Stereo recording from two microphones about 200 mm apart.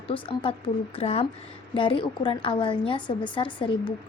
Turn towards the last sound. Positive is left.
turn(degrees=25)  # may be behind; listen again after turning